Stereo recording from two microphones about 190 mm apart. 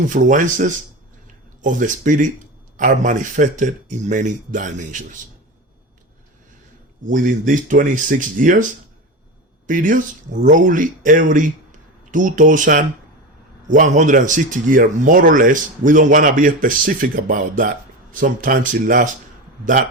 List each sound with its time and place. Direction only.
0.1 s speech: 45° right (ahead or behind)
7.0 s speech: 45° right (ahead or behind)
9.6 s speech: 45° right (ahead or behind)